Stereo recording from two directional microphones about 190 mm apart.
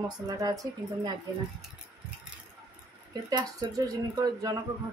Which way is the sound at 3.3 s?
20° right (ahead or behind).